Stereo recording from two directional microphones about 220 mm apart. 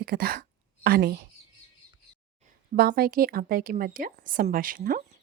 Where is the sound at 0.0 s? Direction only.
45° right (ahead or behind).